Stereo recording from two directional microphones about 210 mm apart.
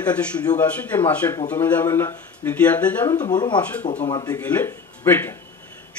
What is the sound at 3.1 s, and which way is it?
Speech, 20° left (ahead or behind).